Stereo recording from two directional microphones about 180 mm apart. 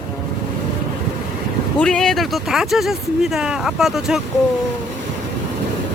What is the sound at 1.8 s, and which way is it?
Speech, 5° left (ahead or behind).